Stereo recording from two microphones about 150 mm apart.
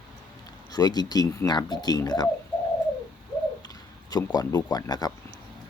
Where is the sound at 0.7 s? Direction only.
25° left (ahead or behind).